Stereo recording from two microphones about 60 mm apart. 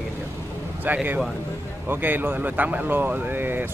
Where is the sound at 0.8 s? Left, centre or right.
Right.